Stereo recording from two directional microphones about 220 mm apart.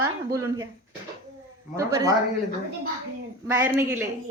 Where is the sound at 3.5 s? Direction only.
10° right (ahead or behind).